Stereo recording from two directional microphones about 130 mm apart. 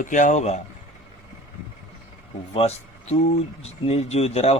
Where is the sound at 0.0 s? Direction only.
80° left; by 0.6 s 60° left (ahead or behind).